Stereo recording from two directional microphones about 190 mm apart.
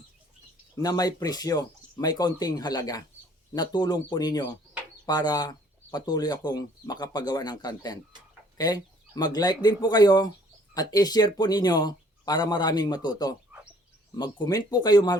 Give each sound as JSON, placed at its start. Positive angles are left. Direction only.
{"t": 0.8, "sound": "speech", "side_deg": 20}